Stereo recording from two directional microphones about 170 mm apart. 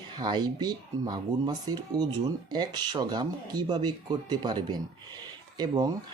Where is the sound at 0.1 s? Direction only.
25° right (ahead or behind).